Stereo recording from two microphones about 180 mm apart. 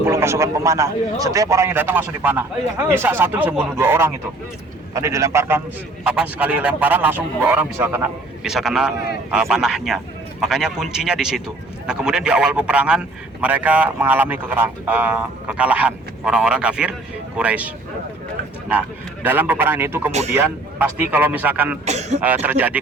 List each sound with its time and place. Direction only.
0.0 s a man's voice: 15° right (ahead or behind)
8.4 s a man's voice: centre (ahead or behind)
19.2 s a man's voice: 10° right (ahead or behind)
20.1 s speech: 40° right (ahead or behind)
20.3 s a man's voice: 10° right (ahead or behind)
21.8 s speech: 40° right (ahead or behind)
22.2 s a man's voice: 10° right (ahead or behind)